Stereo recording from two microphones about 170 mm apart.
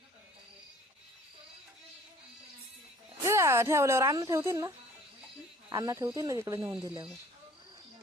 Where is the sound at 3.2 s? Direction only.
15° right (ahead or behind).